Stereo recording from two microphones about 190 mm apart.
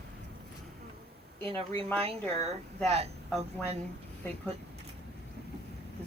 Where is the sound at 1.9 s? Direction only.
30° right (ahead or behind).